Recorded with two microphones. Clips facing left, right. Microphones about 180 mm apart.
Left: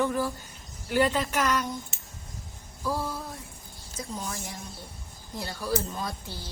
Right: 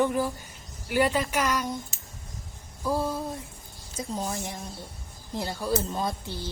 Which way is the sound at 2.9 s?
20° right (ahead or behind).